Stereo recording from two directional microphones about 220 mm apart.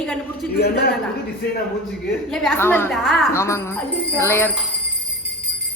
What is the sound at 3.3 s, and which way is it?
A woman's voice, 10° left (ahead or behind).